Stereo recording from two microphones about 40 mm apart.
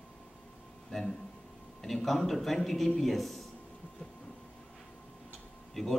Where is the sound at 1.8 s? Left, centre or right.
Centre.